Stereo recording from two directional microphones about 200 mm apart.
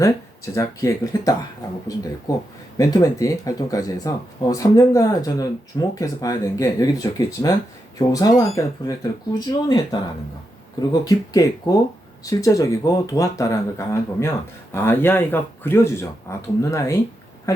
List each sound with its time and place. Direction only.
0.5 s speech: 15° left (ahead or behind)